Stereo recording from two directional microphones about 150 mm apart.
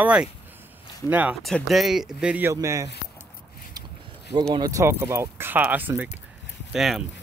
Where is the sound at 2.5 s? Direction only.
20° right (ahead or behind).